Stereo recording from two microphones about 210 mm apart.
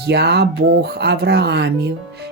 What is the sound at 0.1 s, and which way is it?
Music, 50° right (ahead or behind).